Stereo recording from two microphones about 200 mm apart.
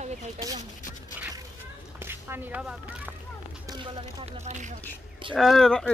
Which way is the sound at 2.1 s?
10° right (ahead or behind).